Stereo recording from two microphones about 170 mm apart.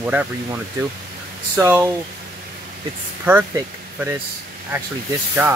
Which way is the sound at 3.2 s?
10° right (ahead or behind).